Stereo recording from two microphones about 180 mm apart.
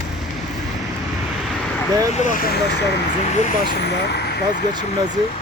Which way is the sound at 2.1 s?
45° left (ahead or behind).